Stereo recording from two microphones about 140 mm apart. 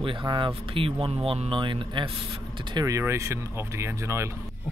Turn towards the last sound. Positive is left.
turn(degrees=-20)  # may be behind; listen again after turning